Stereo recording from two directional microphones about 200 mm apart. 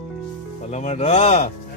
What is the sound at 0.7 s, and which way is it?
Speech, 35° left (ahead or behind).